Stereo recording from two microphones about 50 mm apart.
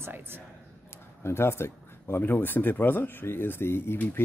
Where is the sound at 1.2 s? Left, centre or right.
Left.